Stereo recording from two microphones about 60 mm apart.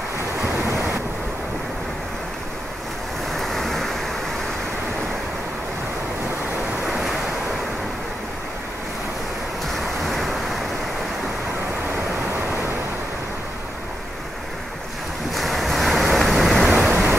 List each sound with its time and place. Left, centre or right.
3.3 s waves: centre
10.0 s waves: centre
15.3 s waves: centre
16.9 s waves: right